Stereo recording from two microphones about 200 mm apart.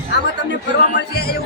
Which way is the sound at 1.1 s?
50° left (ahead or behind).